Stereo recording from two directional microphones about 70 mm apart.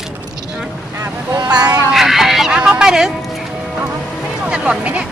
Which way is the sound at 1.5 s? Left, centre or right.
Right.